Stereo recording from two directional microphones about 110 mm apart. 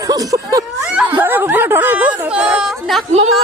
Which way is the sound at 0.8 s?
5° right (ahead or behind).